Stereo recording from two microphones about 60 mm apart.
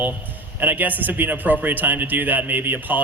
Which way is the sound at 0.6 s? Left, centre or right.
Right.